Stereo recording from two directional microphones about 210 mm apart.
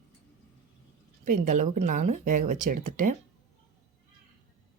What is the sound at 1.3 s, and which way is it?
A woman's voice, 35° right (ahead or behind).